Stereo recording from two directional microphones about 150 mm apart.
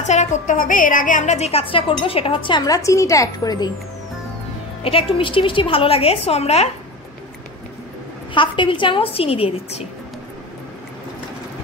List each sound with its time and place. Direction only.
0.0 s a woman's voice: 50° left (ahead or behind); by 3.7 s 25° left (ahead or behind)
4.8 s a woman's voice: 35° left (ahead or behind)
8.4 s a woman's voice: 35° left (ahead or behind)